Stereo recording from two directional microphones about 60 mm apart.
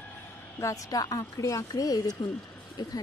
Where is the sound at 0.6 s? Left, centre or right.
Left.